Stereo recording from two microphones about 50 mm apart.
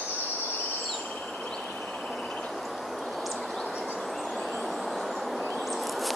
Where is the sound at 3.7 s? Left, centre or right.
Centre.